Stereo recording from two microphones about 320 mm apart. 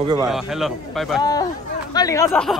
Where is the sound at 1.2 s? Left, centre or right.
Centre.